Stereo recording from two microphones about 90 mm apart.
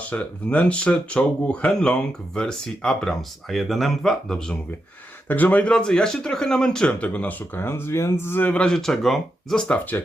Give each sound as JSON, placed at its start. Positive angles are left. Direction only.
{"t": 0.0, "sound": "speech", "side_deg": 15}
{"t": 5.3, "sound": "speech", "side_deg": 20}
{"t": 9.6, "sound": "speech", "side_deg": 20}